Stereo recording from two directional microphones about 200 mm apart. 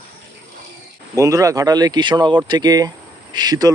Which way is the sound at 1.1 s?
15° right (ahead or behind).